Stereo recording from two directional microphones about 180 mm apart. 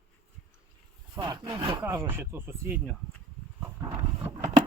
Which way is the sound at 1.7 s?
10° right (ahead or behind).